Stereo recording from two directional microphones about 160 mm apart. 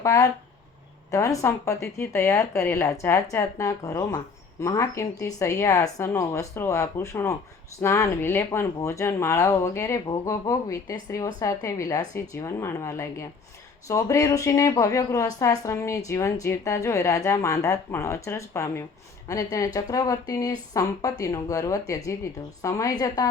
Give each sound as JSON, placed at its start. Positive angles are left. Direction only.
{"t": 0.0, "sound": "speech", "side_deg": 20}